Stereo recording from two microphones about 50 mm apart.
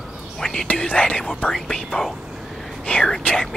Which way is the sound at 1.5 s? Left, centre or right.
Centre.